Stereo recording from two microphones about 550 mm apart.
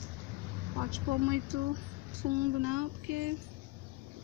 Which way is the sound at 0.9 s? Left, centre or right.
Right.